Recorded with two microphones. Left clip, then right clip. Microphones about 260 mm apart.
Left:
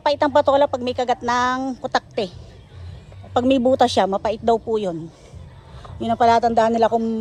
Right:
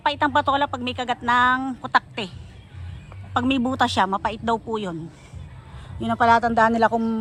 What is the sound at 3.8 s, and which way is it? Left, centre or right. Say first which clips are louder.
Speech: left 3 dB; centre.